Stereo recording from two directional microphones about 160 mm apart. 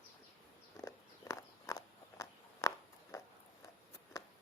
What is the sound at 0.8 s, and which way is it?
Walk, 20° left (ahead or behind).